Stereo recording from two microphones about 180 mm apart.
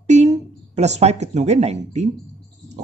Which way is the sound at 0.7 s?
40° right (ahead or behind).